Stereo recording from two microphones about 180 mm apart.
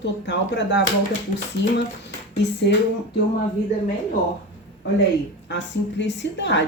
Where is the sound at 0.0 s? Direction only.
75° left (ahead or behind).